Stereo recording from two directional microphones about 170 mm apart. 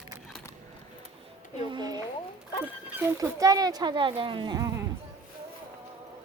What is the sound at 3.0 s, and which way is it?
Speech, 20° right (ahead or behind).